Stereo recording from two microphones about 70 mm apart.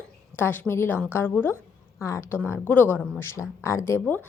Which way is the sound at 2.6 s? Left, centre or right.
Left.